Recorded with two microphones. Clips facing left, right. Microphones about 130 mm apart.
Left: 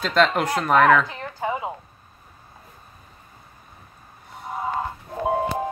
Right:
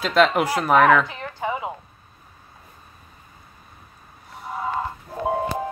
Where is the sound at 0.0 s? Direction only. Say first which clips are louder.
Right 2 dB; 5° right (ahead or behind).